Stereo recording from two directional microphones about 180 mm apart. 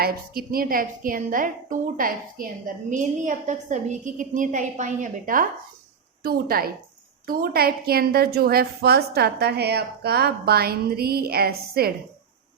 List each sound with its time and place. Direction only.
0.0 s a woman's voice: 55° right (ahead or behind)